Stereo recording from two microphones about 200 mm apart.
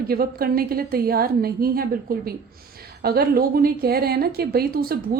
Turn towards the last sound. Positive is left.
turn(degrees=-50)  # may be behind; listen again after turning